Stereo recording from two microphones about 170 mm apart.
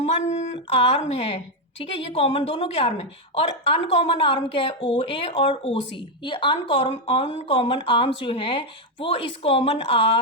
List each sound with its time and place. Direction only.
0.0 s speech: 40° left (ahead or behind)